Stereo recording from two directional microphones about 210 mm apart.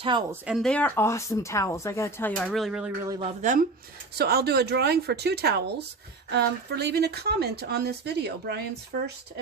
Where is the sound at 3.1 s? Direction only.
25° right (ahead or behind).